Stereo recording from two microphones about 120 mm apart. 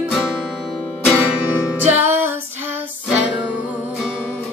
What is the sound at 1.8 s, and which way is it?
Music, 20° right (ahead or behind).